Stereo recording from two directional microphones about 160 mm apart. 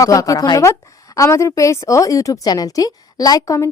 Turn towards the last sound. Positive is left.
turn(degrees=20)  # may be behind; listen again after turning